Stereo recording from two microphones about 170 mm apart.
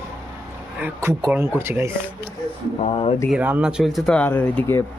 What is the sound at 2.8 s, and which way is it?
Speech, 35° left (ahead or behind).